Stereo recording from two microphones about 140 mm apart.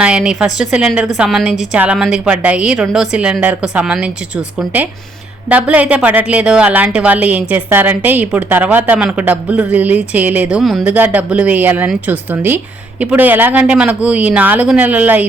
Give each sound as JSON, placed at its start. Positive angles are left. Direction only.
{"t": 0.0, "sound": "a woman's voice", "side_deg": -5}
{"t": 5.5, "sound": "speech", "side_deg": -10}
{"t": 10.6, "sound": "a woman's voice", "side_deg": 0}
{"t": 10.8, "sound": "speech", "side_deg": -10}